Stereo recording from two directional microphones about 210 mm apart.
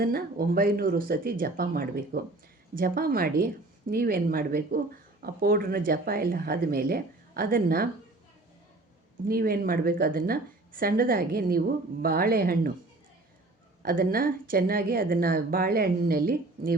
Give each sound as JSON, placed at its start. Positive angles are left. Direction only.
{"t": 0.0, "sound": "speech", "side_deg": -45}
{"t": 9.2, "sound": "speech", "side_deg": -45}
{"t": 13.8, "sound": "speech", "side_deg": -45}